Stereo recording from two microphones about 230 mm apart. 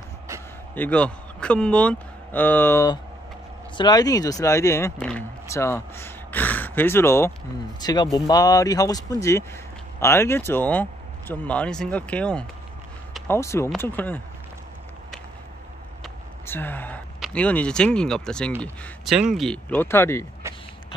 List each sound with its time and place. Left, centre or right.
0.7 s speech: centre
16.0 s speech: centre